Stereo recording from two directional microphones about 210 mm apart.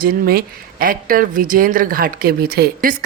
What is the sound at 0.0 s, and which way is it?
Speech, 45° right (ahead or behind).